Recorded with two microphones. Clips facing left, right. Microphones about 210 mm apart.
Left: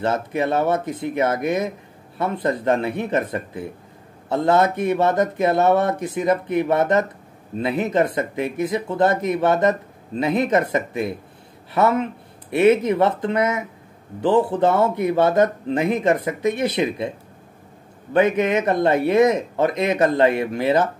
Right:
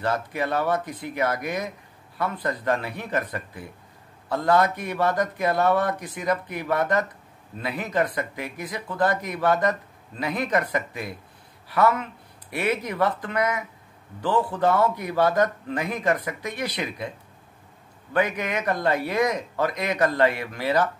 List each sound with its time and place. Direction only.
0.0 s speech: 25° left (ahead or behind)
18.1 s speech: 25° left (ahead or behind)